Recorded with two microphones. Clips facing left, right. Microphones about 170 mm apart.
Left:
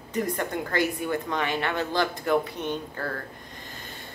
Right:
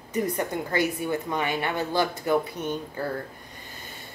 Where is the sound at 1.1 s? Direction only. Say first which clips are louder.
Even; 10° right (ahead or behind).